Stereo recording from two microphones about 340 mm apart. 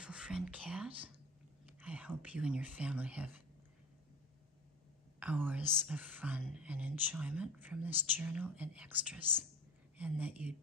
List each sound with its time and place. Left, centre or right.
0.0 s whispering: centre
1.7 s speech: centre
5.2 s speech: centre